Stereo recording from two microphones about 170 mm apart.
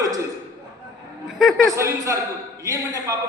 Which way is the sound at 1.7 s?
15° right (ahead or behind).